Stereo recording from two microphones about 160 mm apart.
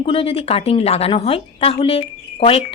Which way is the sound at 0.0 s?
35° left (ahead or behind).